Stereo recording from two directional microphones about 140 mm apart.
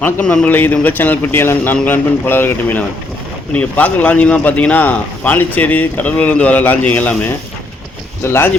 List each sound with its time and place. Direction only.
0.0 s speech: 10° left (ahead or behind)